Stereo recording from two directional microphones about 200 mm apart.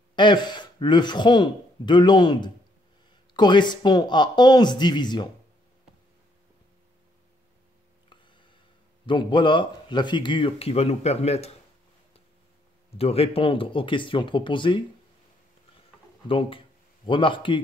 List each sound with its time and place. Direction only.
0.1 s speech: 25° left (ahead or behind)
9.0 s speech: 25° left (ahead or behind)
12.9 s speech: 30° left (ahead or behind)
16.3 s speech: 25° left (ahead or behind)